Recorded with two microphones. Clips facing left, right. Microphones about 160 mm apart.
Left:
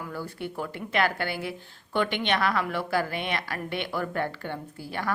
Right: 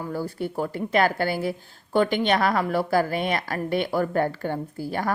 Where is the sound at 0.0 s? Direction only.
35° right (ahead or behind).